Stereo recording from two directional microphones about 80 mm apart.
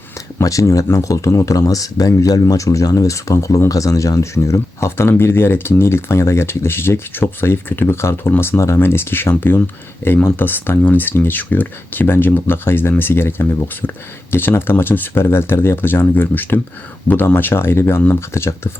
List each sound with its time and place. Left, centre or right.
0.3 s speech: left